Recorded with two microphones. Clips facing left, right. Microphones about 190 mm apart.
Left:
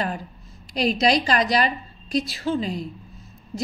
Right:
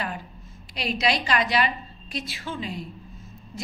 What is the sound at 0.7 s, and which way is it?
A woman's voice, 40° left (ahead or behind).